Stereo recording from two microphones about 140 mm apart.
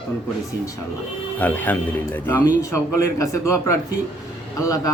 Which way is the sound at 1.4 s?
10° left (ahead or behind).